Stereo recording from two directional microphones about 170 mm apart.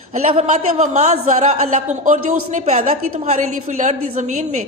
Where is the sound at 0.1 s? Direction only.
40° right (ahead or behind).